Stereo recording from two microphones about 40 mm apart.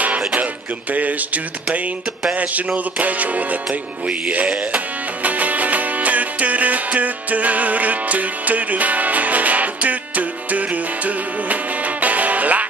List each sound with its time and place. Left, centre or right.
0.9 s music: right